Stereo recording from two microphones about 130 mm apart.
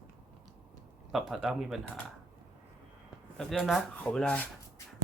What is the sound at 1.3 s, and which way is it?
Speech, centre (ahead or behind).